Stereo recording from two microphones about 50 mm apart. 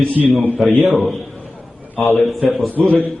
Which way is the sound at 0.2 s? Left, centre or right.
Centre.